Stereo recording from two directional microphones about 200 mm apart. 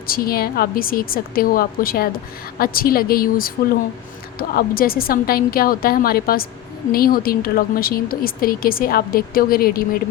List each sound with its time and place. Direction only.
0.1 s speech: 50° left (ahead or behind)